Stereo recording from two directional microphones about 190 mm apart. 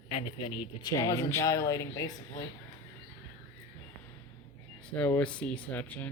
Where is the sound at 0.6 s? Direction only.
20° left (ahead or behind).